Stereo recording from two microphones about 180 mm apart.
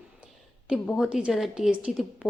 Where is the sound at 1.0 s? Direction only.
5° right (ahead or behind).